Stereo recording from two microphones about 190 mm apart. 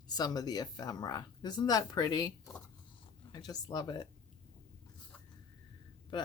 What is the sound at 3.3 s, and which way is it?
Speech, 20° left (ahead or behind).